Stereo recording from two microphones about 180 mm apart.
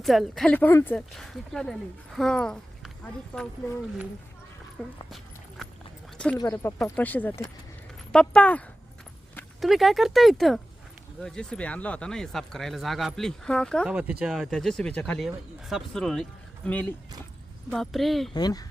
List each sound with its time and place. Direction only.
0.0 s speech: centre (ahead or behind)
4.8 s speech: 5° left (ahead or behind)
6.1 s speech: 5° left (ahead or behind)
6.4 s speech: 15° left (ahead or behind); by 18.3 s centre (ahead or behind)
18.3 s speech: 20° left (ahead or behind)